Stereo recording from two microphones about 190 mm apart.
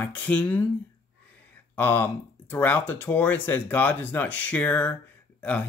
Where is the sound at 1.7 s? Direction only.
10° left (ahead or behind).